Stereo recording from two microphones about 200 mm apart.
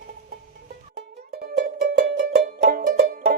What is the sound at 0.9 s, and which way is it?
Music, 55° right (ahead or behind).